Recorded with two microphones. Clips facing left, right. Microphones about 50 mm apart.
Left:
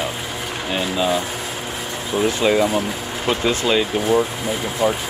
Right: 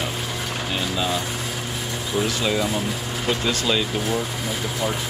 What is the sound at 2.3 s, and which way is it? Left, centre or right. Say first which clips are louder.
Speech: left 6 dB; left.